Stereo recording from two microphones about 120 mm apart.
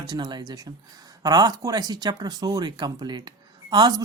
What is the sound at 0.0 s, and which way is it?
A man's voice, 35° right (ahead or behind).